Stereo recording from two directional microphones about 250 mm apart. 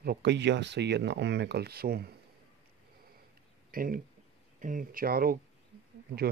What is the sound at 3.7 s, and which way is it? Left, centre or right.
Speech, right.